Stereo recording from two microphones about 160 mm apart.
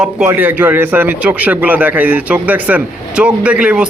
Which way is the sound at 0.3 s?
10° right (ahead or behind).